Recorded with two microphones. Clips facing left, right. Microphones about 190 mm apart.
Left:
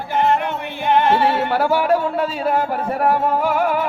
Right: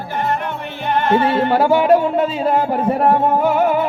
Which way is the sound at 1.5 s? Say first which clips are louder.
Right 4 dB; 20° right (ahead or behind).